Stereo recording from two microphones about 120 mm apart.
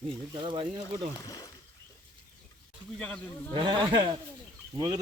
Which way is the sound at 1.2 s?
30° left (ahead or behind).